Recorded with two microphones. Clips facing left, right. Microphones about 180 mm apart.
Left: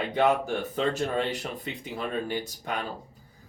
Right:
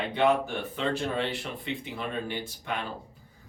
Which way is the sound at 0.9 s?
45° left (ahead or behind).